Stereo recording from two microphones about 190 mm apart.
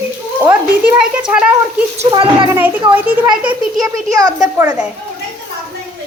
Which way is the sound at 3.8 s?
20° right (ahead or behind).